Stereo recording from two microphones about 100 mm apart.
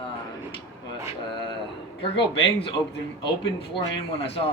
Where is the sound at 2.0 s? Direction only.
65° left (ahead or behind).